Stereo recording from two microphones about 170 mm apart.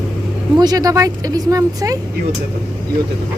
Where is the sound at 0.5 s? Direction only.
25° right (ahead or behind).